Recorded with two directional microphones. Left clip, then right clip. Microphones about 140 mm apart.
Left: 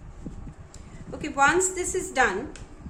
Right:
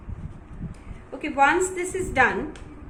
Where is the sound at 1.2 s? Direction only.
40° left (ahead or behind).